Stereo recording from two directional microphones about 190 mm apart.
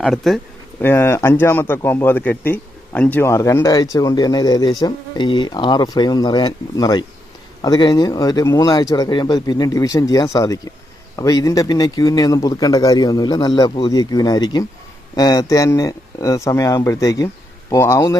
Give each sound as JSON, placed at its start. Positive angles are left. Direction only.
{"t": 0.0, "sound": "speech", "side_deg": 0}
{"t": 0.8, "sound": "speech", "side_deg": 10}